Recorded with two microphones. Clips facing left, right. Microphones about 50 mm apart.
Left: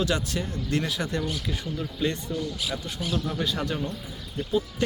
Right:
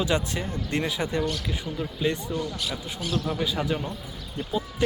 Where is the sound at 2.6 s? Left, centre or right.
Centre.